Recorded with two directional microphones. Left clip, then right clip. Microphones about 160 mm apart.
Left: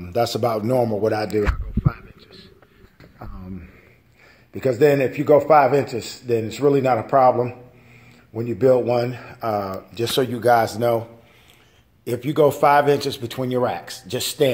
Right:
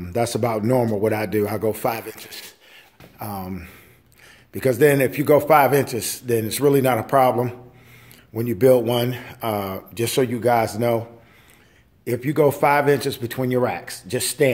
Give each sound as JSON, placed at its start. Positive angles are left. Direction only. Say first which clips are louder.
{"t": 0.0, "sound": "a man's voice", "louder": "left 1 dB", "side_deg": -20}
{"t": 4.6, "sound": "a man's voice", "louder": "even", "side_deg": -15}